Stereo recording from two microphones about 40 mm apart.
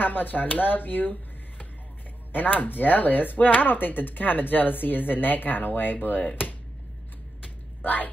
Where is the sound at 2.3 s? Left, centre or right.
Left.